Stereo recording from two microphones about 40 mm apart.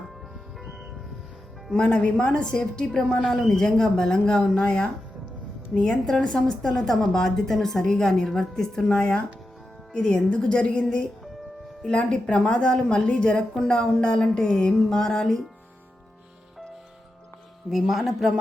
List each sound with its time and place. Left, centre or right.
1.8 s speech: left
2.1 s a woman's voice: left
9.0 s speech: left
14.7 s speech: centre
14.9 s a woman's voice: centre
17.7 s speech: centre